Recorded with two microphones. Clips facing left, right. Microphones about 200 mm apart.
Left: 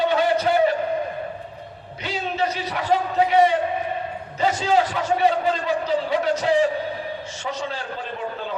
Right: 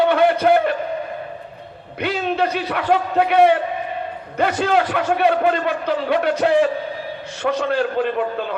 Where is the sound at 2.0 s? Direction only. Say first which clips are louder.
Right 5 dB; 60° right (ahead or behind).